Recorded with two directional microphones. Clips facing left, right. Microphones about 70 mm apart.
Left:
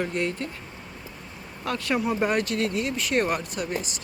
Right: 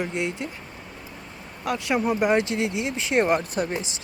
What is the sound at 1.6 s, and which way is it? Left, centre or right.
Speech, centre.